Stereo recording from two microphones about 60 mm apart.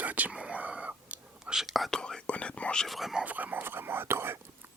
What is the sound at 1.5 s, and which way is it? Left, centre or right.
Speech, centre.